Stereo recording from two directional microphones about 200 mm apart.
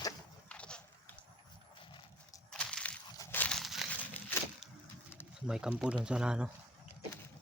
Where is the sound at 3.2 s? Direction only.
10° left (ahead or behind).